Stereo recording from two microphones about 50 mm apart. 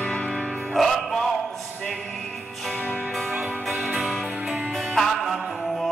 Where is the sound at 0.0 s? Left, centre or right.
Left.